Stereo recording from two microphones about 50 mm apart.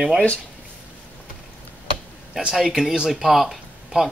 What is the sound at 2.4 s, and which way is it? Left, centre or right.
Speech, centre.